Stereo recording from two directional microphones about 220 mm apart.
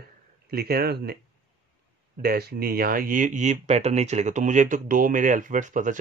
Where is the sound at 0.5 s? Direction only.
45° right (ahead or behind).